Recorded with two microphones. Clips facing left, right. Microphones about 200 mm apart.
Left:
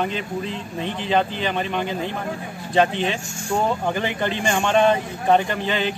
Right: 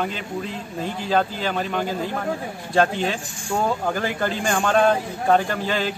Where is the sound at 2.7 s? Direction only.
15° left (ahead or behind).